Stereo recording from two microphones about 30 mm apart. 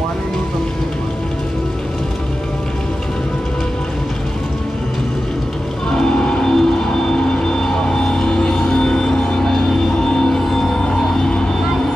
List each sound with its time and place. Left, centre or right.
5.9 s music: left
9.4 s music: centre